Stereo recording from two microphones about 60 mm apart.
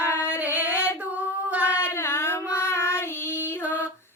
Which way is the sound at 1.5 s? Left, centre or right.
Right.